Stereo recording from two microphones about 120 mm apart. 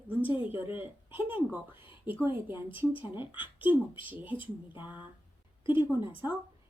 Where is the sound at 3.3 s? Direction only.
15° right (ahead or behind).